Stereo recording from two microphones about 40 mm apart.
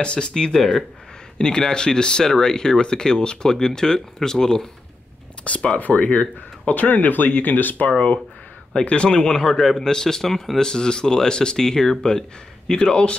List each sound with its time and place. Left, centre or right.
0.0 s speech: left
0.3 s speech: centre
5.5 s speech: left
8.8 s speech: left
9.4 s speech: centre